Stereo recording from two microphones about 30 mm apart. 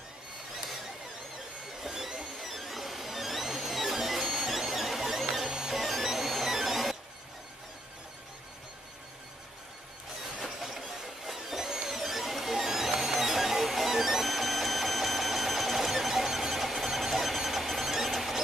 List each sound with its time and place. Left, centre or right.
1.8 s a sound: centre
2.4 s music: centre
5.5 s music: centre
5.8 s music: centre
11.3 s music: centre